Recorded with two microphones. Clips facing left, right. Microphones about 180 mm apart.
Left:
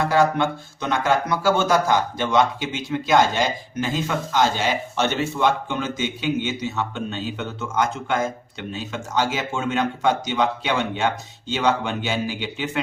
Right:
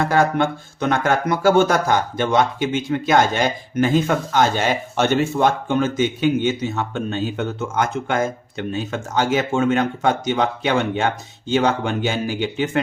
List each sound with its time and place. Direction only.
0.0 s speech: 50° right (ahead or behind)